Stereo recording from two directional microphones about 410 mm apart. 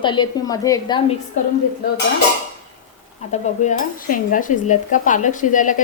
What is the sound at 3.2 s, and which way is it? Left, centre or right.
Speech, centre.